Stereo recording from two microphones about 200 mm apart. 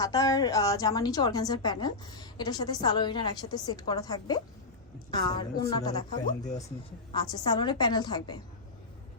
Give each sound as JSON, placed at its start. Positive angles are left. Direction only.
{"t": 0.0, "sound": "a woman's voice", "side_deg": 20}